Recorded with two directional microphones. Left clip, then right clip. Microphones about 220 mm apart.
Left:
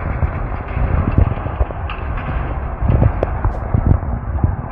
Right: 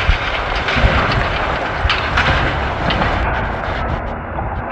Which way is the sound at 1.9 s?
15° right (ahead or behind).